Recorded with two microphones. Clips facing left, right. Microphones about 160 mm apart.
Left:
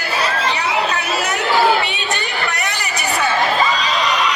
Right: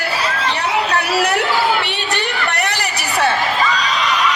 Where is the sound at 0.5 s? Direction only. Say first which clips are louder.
Right 1 dB; 65° right (ahead or behind).